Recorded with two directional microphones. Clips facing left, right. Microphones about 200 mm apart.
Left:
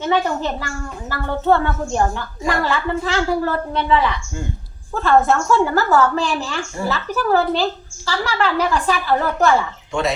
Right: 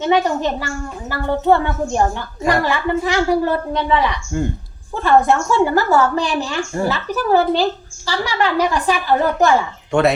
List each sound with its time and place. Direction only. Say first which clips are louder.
0.0 s a woman's voice: right 3 dB; 15° right (ahead or behind)
9.9 s speech: right 6 dB; 60° right (ahead or behind)